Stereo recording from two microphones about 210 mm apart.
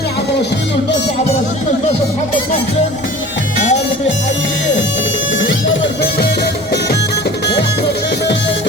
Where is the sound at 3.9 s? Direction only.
60° left (ahead or behind).